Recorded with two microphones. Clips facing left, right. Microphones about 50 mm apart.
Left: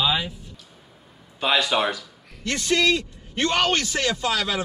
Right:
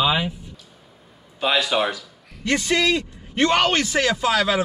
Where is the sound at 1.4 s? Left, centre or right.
Centre.